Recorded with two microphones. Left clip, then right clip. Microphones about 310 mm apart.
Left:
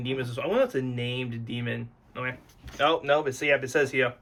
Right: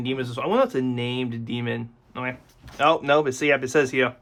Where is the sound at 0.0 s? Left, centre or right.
Centre.